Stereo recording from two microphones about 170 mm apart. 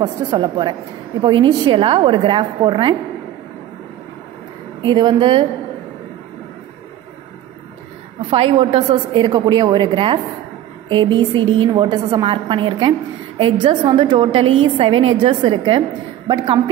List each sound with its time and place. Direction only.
0.0 s a woman's voice: 25° right (ahead or behind)
4.8 s a woman's voice: 25° right (ahead or behind)
8.3 s a woman's voice: 30° right (ahead or behind)